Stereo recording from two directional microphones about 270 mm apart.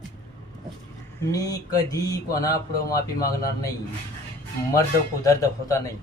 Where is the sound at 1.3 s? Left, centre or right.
Centre.